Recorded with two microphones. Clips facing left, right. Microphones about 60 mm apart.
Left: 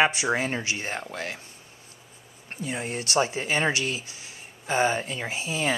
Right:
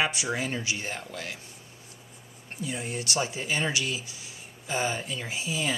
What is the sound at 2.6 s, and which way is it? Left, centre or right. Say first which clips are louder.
Speech: left 2 dB; left.